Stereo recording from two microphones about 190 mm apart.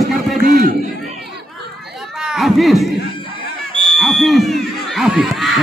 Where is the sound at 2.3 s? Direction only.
Centre (ahead or behind).